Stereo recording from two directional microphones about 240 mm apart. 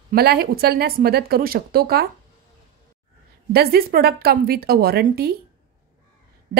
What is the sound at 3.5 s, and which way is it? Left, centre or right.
Speech, right.